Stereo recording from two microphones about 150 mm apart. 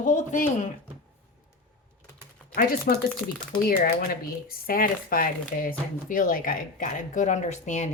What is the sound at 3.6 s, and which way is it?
Speech, 75° left (ahead or behind).